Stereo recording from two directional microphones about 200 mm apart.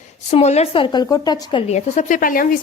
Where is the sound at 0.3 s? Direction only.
35° left (ahead or behind).